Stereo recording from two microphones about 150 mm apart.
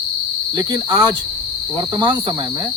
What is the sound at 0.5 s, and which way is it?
Cricket, 25° right (ahead or behind).